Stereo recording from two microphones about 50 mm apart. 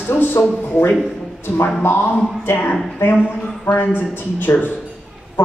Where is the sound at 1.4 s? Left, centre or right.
Left.